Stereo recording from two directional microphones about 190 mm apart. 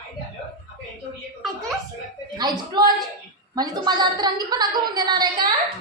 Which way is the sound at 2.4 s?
20° right (ahead or behind).